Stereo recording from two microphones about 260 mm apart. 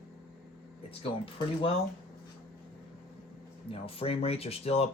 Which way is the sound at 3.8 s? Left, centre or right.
Left.